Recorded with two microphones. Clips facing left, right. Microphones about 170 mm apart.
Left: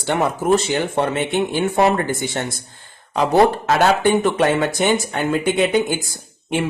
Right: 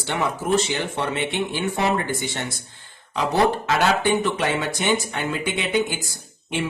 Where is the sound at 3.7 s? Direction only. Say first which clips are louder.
Left 4 dB; 50° left (ahead or behind).